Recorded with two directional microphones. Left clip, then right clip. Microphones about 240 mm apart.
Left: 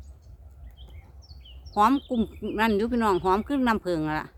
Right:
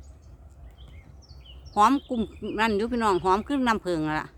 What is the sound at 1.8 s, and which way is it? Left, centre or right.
Speech, centre.